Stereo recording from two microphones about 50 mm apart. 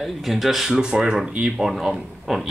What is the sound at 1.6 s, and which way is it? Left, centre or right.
Speech, centre.